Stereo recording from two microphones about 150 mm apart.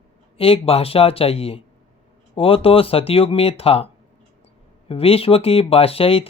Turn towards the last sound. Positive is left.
turn(degrees=40)  # may be behind; listen again after turning